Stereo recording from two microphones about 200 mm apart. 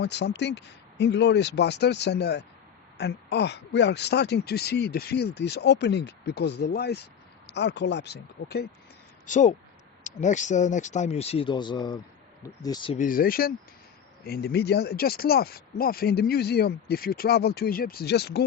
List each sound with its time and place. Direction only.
0.0 s speech: 60° left (ahead or behind)
9.2 s speech: 35° left (ahead or behind)
13.0 s speech: 45° left (ahead or behind)